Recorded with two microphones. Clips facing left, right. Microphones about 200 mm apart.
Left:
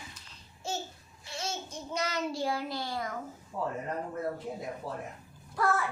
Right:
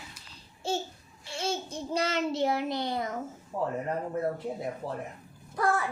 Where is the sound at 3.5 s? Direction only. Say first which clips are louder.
Right 3 dB; 35° right (ahead or behind).